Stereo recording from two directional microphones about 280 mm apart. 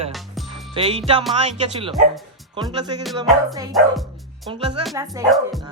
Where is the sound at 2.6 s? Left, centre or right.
Centre.